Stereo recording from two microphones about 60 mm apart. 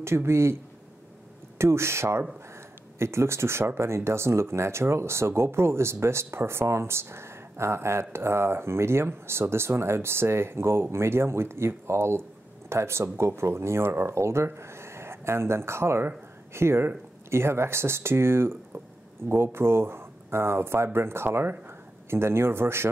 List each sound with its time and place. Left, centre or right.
0.0 s speech: right
1.6 s speech: right